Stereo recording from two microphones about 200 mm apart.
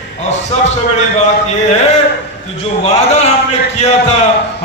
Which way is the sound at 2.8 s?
30° left (ahead or behind).